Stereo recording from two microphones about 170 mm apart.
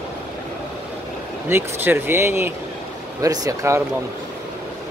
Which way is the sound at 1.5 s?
15° right (ahead or behind).